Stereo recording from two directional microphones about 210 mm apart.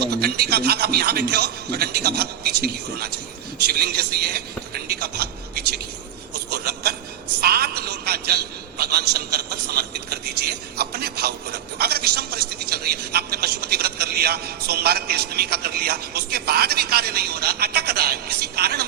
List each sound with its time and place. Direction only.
0.0 s a man's voice: 50° right (ahead or behind)
6.5 s a sound: 50° right (ahead or behind)
7.4 s a man's voice: 45° right (ahead or behind)